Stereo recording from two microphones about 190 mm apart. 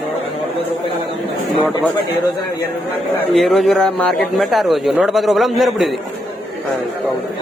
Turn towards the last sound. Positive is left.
turn(degrees=0)  # may be behind; listen again after turning